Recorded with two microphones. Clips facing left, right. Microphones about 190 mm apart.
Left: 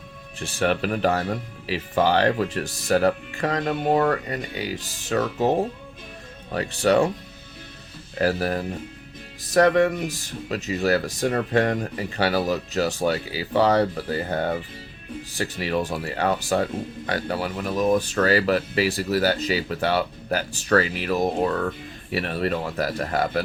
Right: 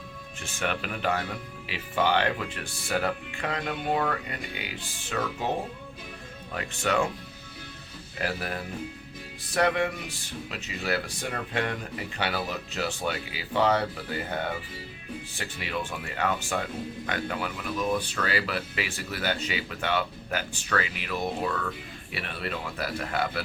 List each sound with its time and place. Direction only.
0.3 s speech: 35° left (ahead or behind)
6.5 s speech: 35° left (ahead or behind)
8.2 s speech: 40° left (ahead or behind)